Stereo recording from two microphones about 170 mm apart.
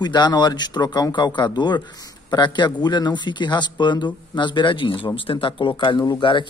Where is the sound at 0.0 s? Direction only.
25° left (ahead or behind).